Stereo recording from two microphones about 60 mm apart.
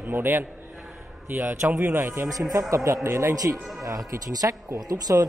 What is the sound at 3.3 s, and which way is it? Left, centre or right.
Speech, right.